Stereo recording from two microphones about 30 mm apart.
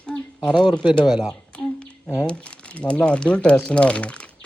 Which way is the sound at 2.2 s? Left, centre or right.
Left.